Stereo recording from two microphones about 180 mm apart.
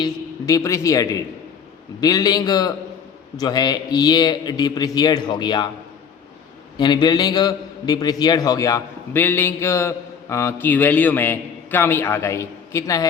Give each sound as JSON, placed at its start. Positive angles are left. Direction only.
{"t": 0.0, "sound": "a man's voice", "side_deg": 20}
{"t": 6.7, "sound": "a man's voice", "side_deg": 25}